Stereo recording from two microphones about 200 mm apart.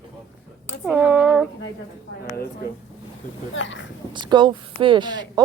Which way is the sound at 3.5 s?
70° left (ahead or behind).